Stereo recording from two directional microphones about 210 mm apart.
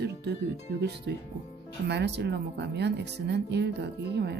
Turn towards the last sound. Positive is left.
turn(degrees=-50)  # may be behind; listen again after turning